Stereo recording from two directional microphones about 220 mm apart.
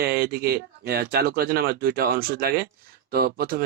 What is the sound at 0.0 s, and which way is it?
Speech, 45° right (ahead or behind).